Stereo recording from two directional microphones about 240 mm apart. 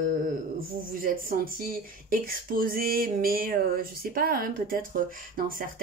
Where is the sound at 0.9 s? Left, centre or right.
Right.